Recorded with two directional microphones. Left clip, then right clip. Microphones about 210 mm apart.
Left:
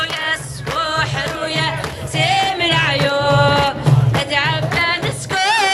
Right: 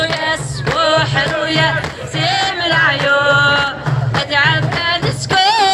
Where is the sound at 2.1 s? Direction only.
10° left (ahead or behind); by 3.9 s 25° left (ahead or behind).